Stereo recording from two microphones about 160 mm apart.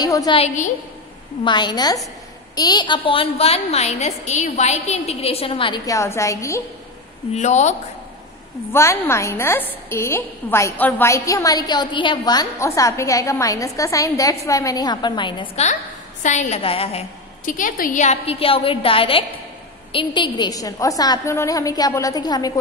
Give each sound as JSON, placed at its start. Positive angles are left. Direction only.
{"t": 0.0, "sound": "a woman's voice", "side_deg": 25}
{"t": 1.4, "sound": "a woman's voice", "side_deg": 30}
{"t": 5.9, "sound": "a woman's voice", "side_deg": 20}
{"t": 7.3, "sound": "a woman's voice", "side_deg": 45}
{"t": 8.7, "sound": "a woman's voice", "side_deg": 15}
{"t": 15.5, "sound": "a woman's voice", "side_deg": 45}
{"t": 17.5, "sound": "a woman's voice", "side_deg": 55}